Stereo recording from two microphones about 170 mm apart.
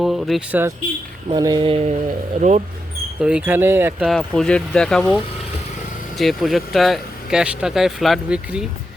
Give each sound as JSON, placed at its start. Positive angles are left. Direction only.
{"t": 0.0, "sound": "speech", "side_deg": 0}
{"t": 1.4, "sound": "a sound", "side_deg": -20}
{"t": 1.6, "sound": "speech", "side_deg": -35}
{"t": 3.2, "sound": "speech", "side_deg": -5}
{"t": 4.0, "sound": "speech", "side_deg": 0}
{"t": 6.1, "sound": "speech", "side_deg": 0}